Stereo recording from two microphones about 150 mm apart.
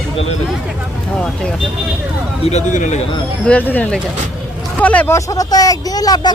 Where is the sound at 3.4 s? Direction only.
10° left (ahead or behind).